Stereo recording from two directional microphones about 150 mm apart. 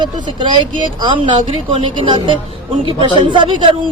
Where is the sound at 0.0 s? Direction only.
35° right (ahead or behind).